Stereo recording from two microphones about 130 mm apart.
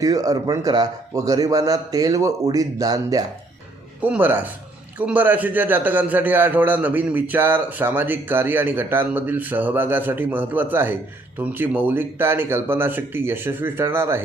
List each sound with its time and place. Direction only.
0.0 s a man's voice: 25° right (ahead or behind)
4.0 s a man's voice: 15° right (ahead or behind)